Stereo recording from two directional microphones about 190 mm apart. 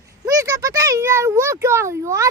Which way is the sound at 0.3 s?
20° right (ahead or behind).